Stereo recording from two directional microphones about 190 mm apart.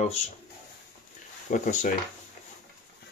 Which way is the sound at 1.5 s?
40° left (ahead or behind).